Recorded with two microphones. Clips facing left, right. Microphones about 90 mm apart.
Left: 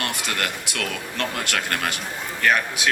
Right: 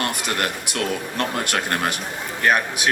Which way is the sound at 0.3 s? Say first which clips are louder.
Right 3 dB; 20° right (ahead or behind).